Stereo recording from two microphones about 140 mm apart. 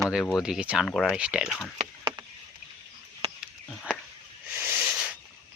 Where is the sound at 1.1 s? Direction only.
10° right (ahead or behind).